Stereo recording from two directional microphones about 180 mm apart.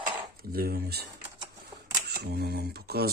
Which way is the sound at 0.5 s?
60° right (ahead or behind).